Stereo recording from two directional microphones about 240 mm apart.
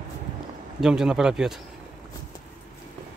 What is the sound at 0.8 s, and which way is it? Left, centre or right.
Speech, centre.